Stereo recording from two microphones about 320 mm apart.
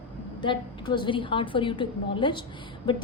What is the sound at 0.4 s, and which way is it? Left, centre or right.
A woman's voice, centre.